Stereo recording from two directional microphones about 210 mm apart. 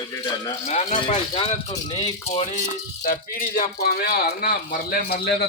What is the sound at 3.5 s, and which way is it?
Speech, 45° left (ahead or behind).